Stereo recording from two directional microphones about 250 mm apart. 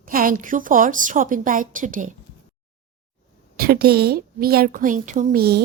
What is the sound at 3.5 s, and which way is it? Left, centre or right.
A woman's voice, right.